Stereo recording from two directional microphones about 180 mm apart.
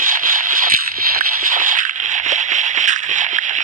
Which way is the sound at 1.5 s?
50° right (ahead or behind).